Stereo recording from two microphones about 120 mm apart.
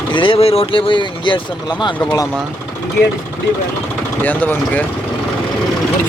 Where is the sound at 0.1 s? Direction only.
45° left (ahead or behind).